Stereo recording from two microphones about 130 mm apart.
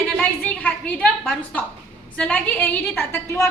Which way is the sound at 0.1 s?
10° left (ahead or behind).